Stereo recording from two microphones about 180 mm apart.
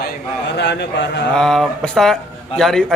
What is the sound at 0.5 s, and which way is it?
Speech, 70° left (ahead or behind).